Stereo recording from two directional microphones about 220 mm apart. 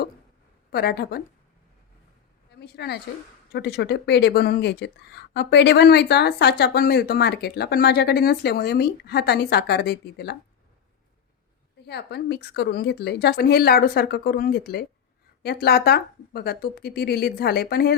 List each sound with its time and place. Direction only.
0.7 s speech: 45° left (ahead or behind)
2.6 s a woman's voice: 50° left (ahead or behind)
11.9 s speech: 50° left (ahead or behind)